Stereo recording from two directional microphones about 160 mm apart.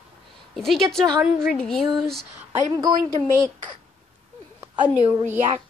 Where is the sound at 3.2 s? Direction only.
35° right (ahead or behind).